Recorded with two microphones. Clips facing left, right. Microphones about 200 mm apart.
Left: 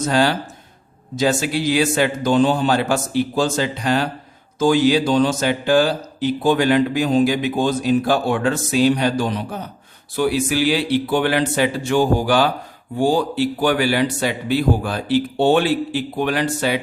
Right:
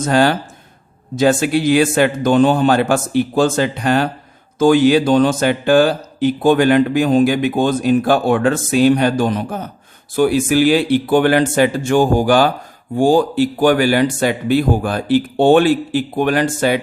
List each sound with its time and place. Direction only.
0.0 s speech: 50° right (ahead or behind)